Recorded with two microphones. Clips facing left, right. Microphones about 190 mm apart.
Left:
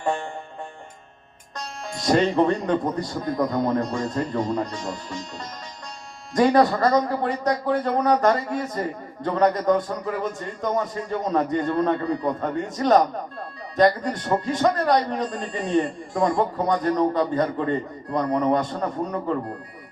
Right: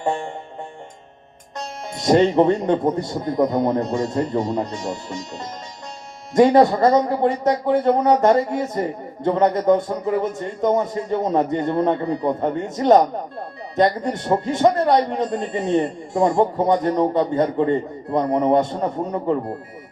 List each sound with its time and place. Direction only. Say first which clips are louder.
0.0 s music: right 2 dB; 25° right (ahead or behind)
1.5 s a man's voice: right 3 dB; 25° right (ahead or behind)